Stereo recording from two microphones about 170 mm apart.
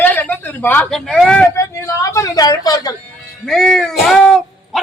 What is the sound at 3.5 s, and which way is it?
Speech, centre (ahead or behind).